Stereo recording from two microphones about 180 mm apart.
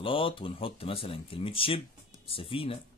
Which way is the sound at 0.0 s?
30° left (ahead or behind).